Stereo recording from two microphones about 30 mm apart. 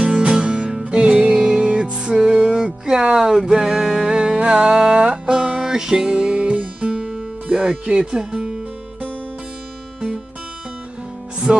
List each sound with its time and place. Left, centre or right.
0.0 s music: right
3.2 s music: centre; by 5.3 s right
5.3 s music: right
7.4 s speech: right
8.0 s speech: right
11.5 s speech: right